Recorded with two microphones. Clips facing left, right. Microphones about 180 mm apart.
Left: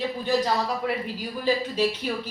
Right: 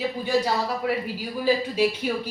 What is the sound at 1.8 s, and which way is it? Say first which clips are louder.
Speech: right 2 dB; 10° right (ahead or behind).